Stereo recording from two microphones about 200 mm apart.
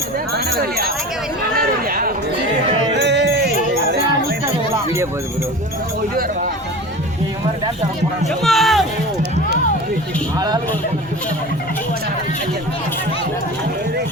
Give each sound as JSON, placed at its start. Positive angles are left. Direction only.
{"t": 0.3, "sound": "speech", "side_deg": -50}
{"t": 1.5, "sound": "a sound", "side_deg": -45}
{"t": 2.9, "sound": "music", "side_deg": -60}
{"t": 8.4, "sound": "speech", "side_deg": 0}